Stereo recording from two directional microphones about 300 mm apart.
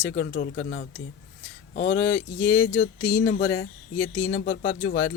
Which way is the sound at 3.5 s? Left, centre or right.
Centre.